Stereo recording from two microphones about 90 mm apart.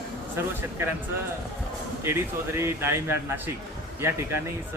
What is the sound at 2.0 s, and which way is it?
Speech, 25° right (ahead or behind).